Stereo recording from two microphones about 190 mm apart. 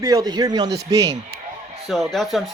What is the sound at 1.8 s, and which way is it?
Speech, centre (ahead or behind).